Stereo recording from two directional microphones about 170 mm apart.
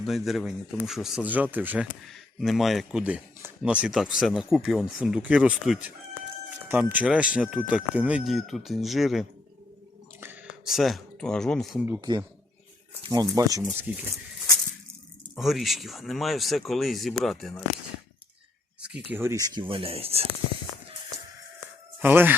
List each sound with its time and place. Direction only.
0.0 s speech: centre (ahead or behind)
10.7 s speech: centre (ahead or behind)
11.9 s speech: 25° right (ahead or behind)
15.4 s speech: centre (ahead or behind)
18.8 s speech: 5° right (ahead or behind); by 20.2 s 35° right (ahead or behind)
22.0 s speech: 10° right (ahead or behind)